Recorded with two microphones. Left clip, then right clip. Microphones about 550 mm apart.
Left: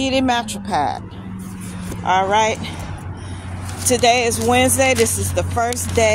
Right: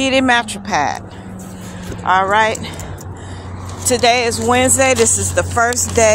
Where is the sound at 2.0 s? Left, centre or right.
Left.